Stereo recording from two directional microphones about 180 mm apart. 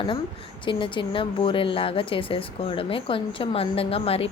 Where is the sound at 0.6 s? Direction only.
25° left (ahead or behind).